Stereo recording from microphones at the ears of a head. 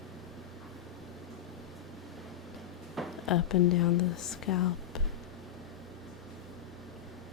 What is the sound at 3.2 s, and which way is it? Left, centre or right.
Speech, left.